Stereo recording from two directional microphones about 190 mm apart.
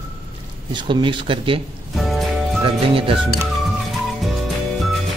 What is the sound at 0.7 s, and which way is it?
Speech, 25° right (ahead or behind).